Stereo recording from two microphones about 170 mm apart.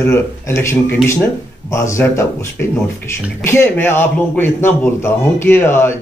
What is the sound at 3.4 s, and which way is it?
A man's voice, 15° left (ahead or behind).